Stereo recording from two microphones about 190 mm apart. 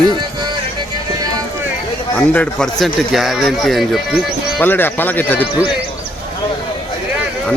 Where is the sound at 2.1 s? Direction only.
5° left (ahead or behind).